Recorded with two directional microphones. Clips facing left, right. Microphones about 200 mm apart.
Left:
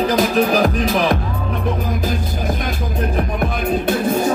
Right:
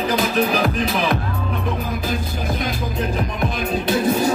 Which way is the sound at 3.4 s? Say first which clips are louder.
Left 3 dB; 55° left (ahead or behind).